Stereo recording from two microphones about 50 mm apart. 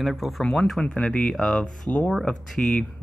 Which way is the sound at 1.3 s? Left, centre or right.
Centre.